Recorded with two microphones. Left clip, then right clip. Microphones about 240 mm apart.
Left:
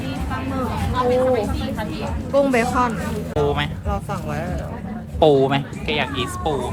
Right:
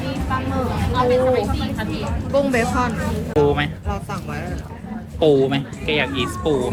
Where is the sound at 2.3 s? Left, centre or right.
Centre.